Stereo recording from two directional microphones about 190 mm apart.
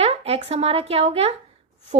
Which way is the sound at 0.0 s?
30° right (ahead or behind).